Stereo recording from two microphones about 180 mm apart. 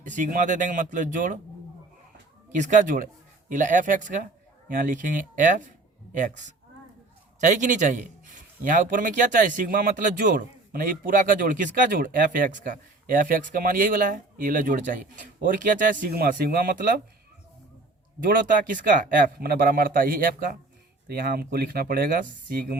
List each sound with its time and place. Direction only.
0.0 s a man's voice: 45° right (ahead or behind)
2.5 s a man's voice: 45° right (ahead or behind)
18.2 s a man's voice: 50° right (ahead or behind)